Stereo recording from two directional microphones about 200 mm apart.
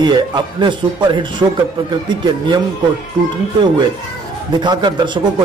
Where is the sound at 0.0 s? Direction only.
20° right (ahead or behind).